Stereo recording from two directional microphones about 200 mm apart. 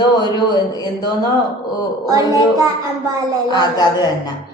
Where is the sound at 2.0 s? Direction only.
15° right (ahead or behind).